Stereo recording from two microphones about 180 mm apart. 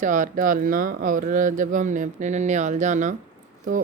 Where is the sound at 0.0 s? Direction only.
45° right (ahead or behind).